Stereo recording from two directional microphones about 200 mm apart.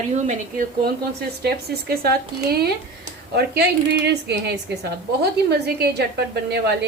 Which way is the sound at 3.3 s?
55° right (ahead or behind).